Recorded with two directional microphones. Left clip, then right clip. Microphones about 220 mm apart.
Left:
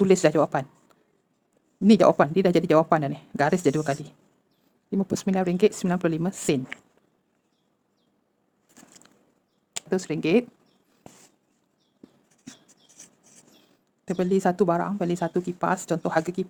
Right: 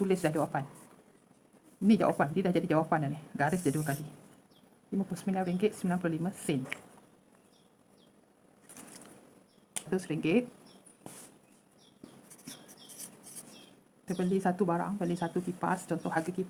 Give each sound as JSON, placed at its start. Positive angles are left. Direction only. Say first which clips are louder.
{"t": 0.0, "sound": "speech", "louder": "left 11 dB", "side_deg": 50}
{"t": 1.9, "sound": "speech", "louder": "left 10 dB", "side_deg": 50}
{"t": 9.7, "sound": "speech", "louder": "left 7 dB", "side_deg": 50}
{"t": 14.1, "sound": "speech", "louder": "left 8 dB", "side_deg": 50}